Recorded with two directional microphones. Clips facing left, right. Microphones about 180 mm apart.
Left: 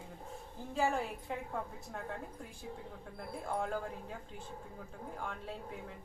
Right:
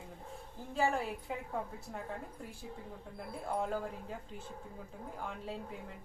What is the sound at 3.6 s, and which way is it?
Speech, centre (ahead or behind).